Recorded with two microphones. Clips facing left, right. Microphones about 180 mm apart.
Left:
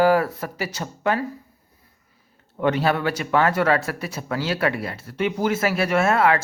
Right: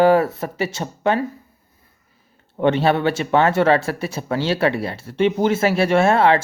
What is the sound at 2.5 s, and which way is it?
Speech, 25° right (ahead or behind).